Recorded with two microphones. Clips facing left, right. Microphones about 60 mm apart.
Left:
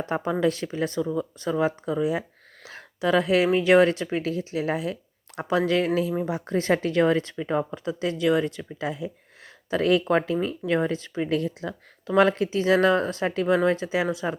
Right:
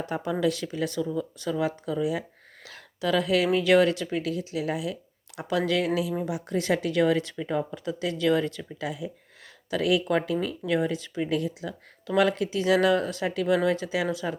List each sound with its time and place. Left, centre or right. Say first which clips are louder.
0.0 s speech: left 3 dB; left
7.9 s speech: left 1 dB; left